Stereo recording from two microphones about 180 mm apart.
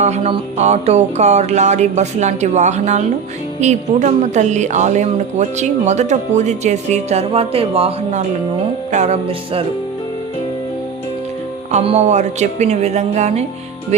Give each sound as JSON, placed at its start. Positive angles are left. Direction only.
{"t": 0.0, "sound": "speech", "side_deg": -40}
{"t": 11.7, "sound": "speech", "side_deg": -40}